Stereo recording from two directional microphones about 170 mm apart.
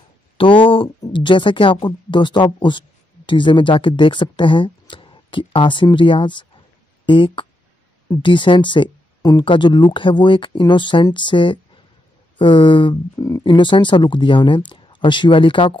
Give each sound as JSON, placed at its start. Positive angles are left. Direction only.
{"t": 0.4, "sound": "speech", "side_deg": 30}